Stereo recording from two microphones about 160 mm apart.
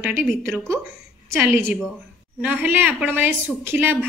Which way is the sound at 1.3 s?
15° right (ahead or behind).